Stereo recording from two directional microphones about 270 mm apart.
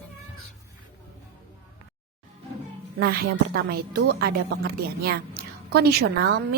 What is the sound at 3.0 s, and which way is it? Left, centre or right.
Speech, right.